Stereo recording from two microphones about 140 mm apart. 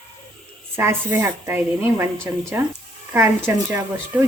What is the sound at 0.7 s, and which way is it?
Speech, 15° right (ahead or behind).